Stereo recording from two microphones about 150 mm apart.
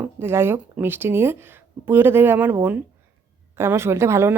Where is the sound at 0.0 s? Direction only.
15° right (ahead or behind).